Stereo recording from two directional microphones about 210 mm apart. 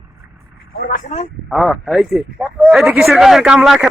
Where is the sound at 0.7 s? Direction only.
40° left (ahead or behind).